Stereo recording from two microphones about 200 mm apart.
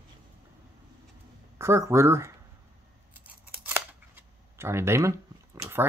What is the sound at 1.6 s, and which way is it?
Speech, 15° right (ahead or behind).